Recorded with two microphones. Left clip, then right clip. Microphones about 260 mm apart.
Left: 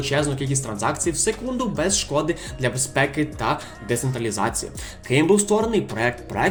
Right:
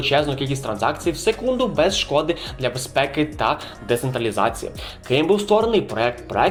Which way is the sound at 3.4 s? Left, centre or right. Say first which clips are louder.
Right 3 dB; left.